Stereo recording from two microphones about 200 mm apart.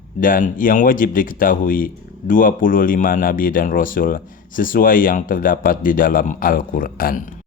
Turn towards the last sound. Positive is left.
turn(degrees=45)  # may be behind; listen again after turning